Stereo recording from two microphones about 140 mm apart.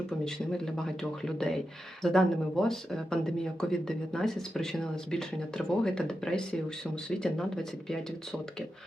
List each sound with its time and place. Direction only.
0.5 s speech: 5° left (ahead or behind)